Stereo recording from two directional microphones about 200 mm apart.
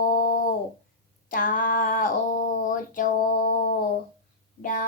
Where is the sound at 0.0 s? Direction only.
45° left (ahead or behind).